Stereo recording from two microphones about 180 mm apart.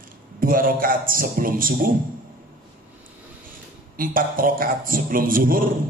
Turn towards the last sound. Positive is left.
turn(degrees=-50)  # may be behind; listen again after turning